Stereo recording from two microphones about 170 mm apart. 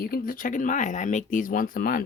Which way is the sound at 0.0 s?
60° left (ahead or behind).